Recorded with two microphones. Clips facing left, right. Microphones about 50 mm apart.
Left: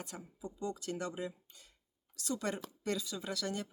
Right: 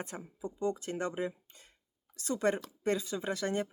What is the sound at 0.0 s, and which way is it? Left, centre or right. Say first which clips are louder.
Speech: right 5 dB; right.